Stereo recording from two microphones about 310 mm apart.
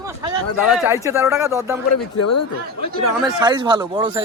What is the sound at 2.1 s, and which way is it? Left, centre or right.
Speech, left.